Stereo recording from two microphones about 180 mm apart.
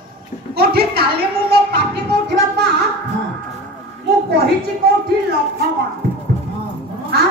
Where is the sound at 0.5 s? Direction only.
60° right (ahead or behind).